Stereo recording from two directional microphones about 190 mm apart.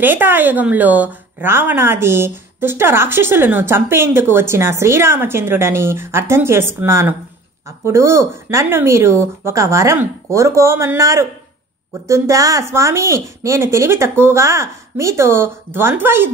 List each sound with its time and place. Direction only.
0.0 s speech: 10° right (ahead or behind)